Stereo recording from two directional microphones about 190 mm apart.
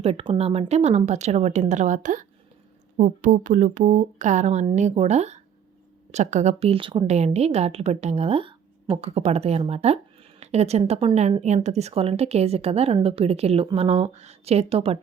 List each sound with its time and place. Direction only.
0.0 s a woman's voice: 30° right (ahead or behind)